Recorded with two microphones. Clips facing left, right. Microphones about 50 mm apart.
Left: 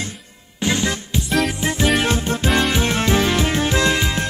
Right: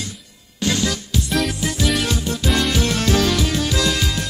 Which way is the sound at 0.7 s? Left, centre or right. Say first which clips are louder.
Left 1 dB; left.